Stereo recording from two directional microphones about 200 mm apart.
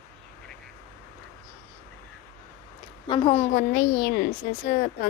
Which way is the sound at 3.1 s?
25° left (ahead or behind).